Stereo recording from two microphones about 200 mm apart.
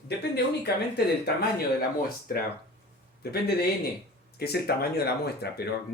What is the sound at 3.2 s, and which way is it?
A man's voice, 55° left (ahead or behind).